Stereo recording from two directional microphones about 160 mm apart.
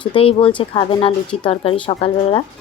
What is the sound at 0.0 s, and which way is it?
Speech, 35° left (ahead or behind).